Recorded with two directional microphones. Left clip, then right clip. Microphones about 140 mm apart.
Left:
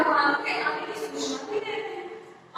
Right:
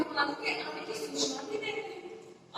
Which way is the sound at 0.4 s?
20° right (ahead or behind).